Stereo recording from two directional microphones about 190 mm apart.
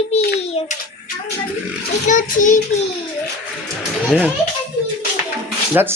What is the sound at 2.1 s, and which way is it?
Speech, 40° left (ahead or behind).